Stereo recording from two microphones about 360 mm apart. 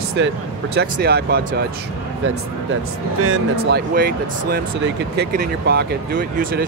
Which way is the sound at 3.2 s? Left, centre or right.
Right.